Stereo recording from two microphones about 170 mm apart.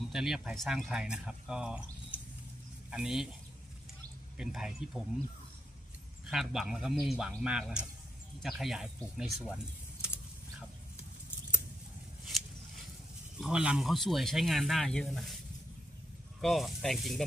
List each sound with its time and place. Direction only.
0.1 s speech: 5° right (ahead or behind)
4.4 s speech: 5° right (ahead or behind)
6.3 s speech: 5° right (ahead or behind)
12.3 s a sound: centre (ahead or behind)
13.4 s speech: 5° right (ahead or behind)
16.3 s speech: centre (ahead or behind)